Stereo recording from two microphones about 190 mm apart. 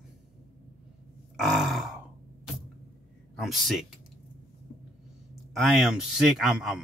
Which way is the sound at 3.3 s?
Centre (ahead or behind).